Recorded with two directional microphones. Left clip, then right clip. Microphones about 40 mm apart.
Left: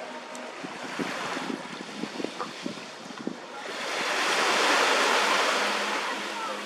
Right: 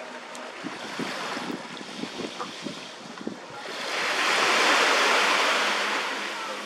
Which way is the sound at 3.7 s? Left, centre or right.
Centre.